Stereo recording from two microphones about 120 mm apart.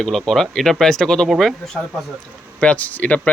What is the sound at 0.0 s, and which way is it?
Speech, 5° left (ahead or behind).